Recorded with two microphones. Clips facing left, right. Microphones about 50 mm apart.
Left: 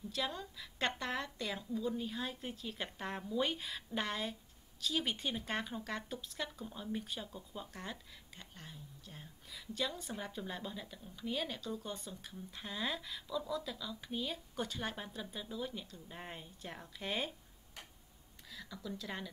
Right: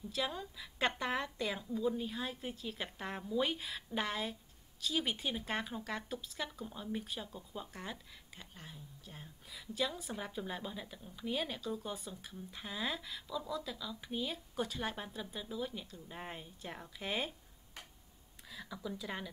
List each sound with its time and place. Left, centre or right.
0.1 s a woman's voice: centre
18.5 s speech: centre